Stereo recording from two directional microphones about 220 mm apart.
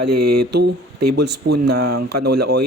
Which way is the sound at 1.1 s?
50° right (ahead or behind).